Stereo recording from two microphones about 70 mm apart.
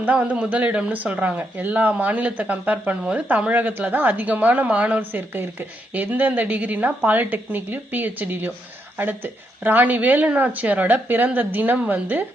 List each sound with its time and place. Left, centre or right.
0.0 s speech: right